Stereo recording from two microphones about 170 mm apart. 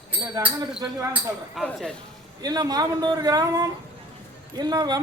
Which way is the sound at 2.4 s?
20° right (ahead or behind).